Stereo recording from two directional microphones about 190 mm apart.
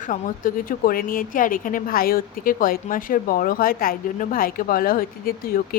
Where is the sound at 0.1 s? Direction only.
45° left (ahead or behind).